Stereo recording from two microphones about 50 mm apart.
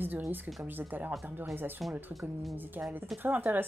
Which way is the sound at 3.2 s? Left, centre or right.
Right.